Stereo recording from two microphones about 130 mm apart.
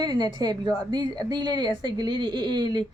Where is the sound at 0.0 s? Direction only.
35° right (ahead or behind).